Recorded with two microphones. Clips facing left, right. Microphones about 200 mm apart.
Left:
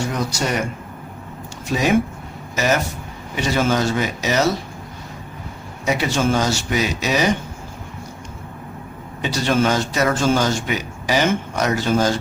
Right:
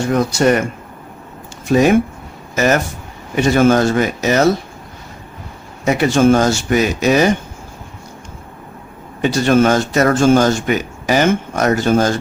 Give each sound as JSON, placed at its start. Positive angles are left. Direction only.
{"t": 0.1, "sound": "speech", "side_deg": -55}
{"t": 1.6, "sound": "speech", "side_deg": -50}
{"t": 5.8, "sound": "speech", "side_deg": -50}
{"t": 9.2, "sound": "speech", "side_deg": -50}